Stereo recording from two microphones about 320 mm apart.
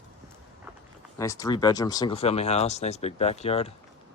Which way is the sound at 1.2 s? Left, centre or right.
Centre.